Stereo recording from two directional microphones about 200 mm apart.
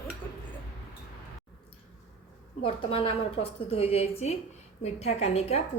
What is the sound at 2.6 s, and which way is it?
A woman's voice, 25° left (ahead or behind).